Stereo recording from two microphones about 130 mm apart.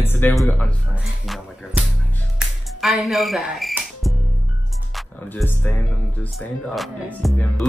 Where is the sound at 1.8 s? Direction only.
15° right (ahead or behind).